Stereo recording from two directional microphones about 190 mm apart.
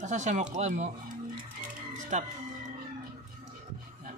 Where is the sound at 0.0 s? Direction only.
40° right (ahead or behind).